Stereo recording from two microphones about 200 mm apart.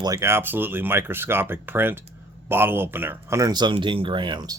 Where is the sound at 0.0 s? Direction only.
15° right (ahead or behind).